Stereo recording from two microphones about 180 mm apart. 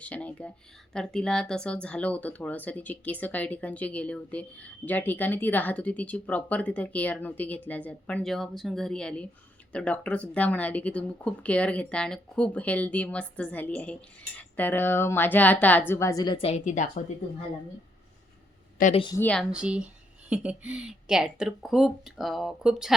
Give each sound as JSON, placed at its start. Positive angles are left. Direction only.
{"t": 0.0, "sound": "speech", "side_deg": 5}
{"t": 18.9, "sound": "a woman's voice", "side_deg": 25}
{"t": 19.2, "sound": "speech", "side_deg": 5}
{"t": 19.5, "sound": "speech", "side_deg": -5}